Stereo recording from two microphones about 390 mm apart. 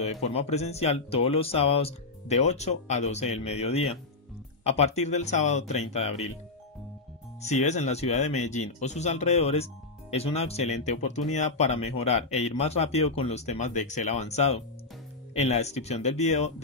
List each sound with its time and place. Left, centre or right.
0.0 s speech: centre
7.4 s speech: centre